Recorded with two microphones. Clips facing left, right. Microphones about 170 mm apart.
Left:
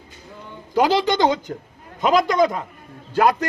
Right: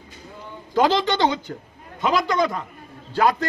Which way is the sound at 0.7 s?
10° left (ahead or behind).